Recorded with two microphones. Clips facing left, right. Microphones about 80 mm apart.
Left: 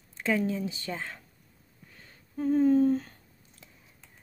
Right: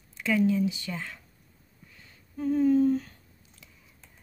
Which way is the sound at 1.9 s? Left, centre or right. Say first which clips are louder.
Left 3 dB; left.